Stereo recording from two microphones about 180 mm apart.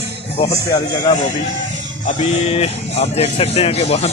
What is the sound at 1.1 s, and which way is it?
Speech, 20° left (ahead or behind).